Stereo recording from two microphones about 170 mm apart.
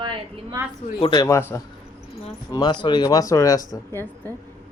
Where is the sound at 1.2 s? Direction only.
15° left (ahead or behind).